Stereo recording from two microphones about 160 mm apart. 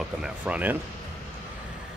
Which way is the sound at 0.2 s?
10° right (ahead or behind).